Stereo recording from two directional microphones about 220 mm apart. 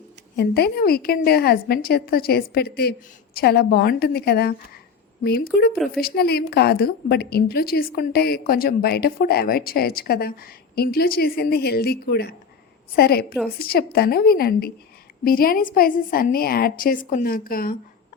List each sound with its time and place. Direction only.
0.3 s a woman's voice: 45° left (ahead or behind)